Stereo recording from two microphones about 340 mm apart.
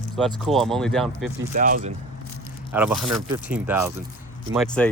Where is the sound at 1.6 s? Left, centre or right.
Right.